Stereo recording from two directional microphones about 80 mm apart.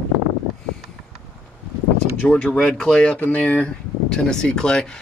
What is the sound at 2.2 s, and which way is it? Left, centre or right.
Speech, centre.